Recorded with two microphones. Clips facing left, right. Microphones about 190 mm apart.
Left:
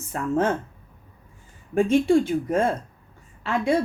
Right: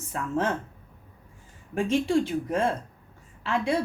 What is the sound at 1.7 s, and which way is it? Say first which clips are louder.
Speech: left 5 dB; 50° left (ahead or behind).